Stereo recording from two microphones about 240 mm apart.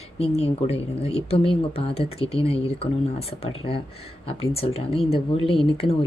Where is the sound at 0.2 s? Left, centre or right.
Left.